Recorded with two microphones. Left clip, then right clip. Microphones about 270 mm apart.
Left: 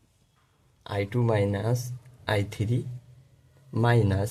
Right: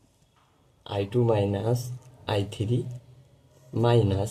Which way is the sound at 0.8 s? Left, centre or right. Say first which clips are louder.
Right 3 dB; left.